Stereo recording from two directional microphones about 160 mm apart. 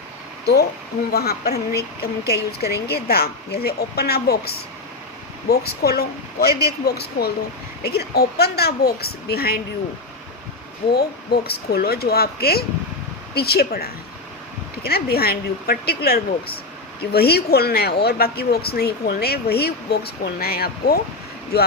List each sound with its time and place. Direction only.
1.1 s speech: 80° left
10.9 s speech: 80° left
21.5 s speech: 90° left